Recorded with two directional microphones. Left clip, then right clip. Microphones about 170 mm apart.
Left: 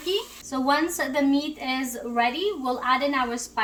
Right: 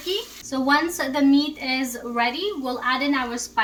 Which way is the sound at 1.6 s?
30° left (ahead or behind).